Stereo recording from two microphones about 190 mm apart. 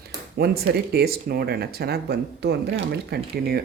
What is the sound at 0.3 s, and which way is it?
Speech, 55° right (ahead or behind).